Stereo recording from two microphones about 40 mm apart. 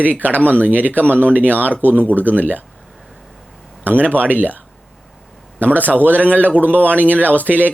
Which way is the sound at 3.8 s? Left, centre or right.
Right.